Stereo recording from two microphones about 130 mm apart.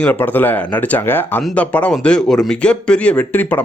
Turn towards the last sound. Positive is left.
turn(degrees=15)  # may be behind; listen again after turning